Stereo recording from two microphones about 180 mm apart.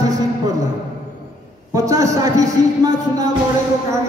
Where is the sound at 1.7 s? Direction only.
20° right (ahead or behind).